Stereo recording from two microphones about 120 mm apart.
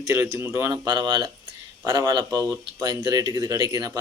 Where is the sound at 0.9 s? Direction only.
40° right (ahead or behind).